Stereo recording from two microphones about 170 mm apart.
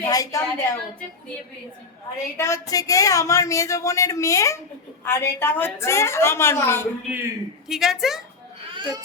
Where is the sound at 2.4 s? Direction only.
20° left (ahead or behind).